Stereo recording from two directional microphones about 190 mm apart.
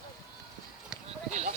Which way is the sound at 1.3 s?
40° right (ahead or behind).